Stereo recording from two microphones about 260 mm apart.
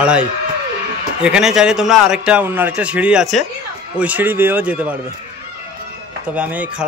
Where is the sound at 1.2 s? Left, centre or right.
Centre.